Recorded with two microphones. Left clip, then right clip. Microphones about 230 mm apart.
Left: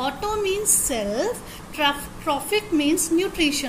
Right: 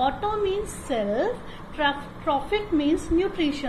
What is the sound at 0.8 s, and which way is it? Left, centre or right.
A woman's voice, left.